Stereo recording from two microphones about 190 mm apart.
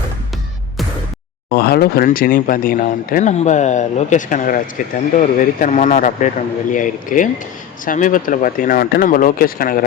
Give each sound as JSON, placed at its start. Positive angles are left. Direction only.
{"t": 1.5, "sound": "speech", "side_deg": 55}